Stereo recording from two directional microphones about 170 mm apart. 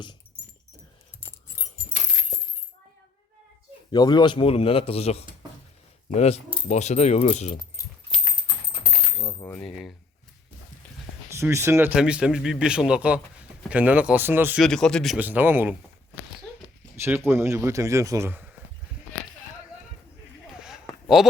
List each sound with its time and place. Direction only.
3.9 s speech: 25° left (ahead or behind); by 7.5 s 40° left (ahead or behind)
9.4 s coin: 15° left (ahead or behind)
9.6 s a man's voice: centre (ahead or behind)
11.3 s a man's voice: 15° right (ahead or behind)
14.6 s a man's voice: 5° left (ahead or behind)
15.2 s a man's voice: 10° right (ahead or behind)
17.0 s a man's voice: 15° right (ahead or behind)
20.5 s a sound: 5° right (ahead or behind)
21.2 s a man's voice: centre (ahead or behind)